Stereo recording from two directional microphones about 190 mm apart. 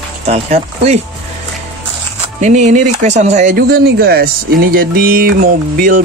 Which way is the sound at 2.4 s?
40° right (ahead or behind).